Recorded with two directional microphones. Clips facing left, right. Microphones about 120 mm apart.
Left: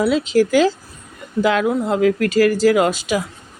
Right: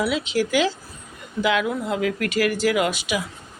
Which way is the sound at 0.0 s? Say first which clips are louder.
Left 7 dB; 40° left (ahead or behind).